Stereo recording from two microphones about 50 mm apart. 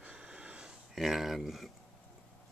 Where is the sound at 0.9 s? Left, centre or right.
Centre.